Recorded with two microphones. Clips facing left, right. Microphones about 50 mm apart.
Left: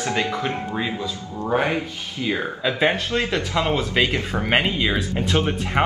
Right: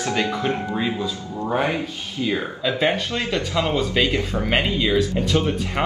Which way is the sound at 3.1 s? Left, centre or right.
Centre.